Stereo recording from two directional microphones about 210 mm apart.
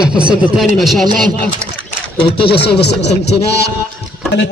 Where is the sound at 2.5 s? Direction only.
50° left (ahead or behind).